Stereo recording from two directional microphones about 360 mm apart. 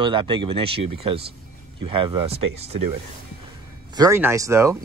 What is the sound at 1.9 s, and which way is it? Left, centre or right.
Speech, centre.